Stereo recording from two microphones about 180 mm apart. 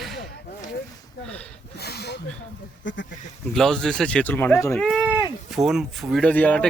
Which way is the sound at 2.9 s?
90° left.